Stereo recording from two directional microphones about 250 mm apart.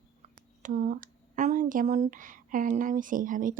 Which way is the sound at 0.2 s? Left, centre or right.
Right.